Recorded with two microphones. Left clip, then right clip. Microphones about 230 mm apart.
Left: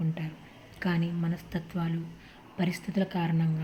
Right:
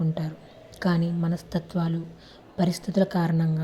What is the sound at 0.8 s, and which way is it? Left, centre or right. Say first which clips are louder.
A woman's voice: right 5 dB; centre.